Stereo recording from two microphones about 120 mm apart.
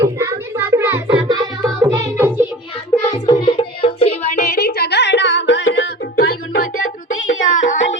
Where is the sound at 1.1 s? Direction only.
35° right (ahead or behind).